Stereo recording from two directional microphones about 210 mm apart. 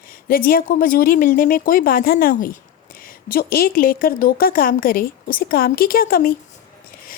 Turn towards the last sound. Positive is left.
turn(degrees=45)  # may be behind; listen again after turning